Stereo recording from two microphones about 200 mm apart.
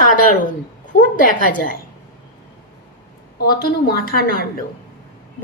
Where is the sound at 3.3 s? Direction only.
50° left (ahead or behind).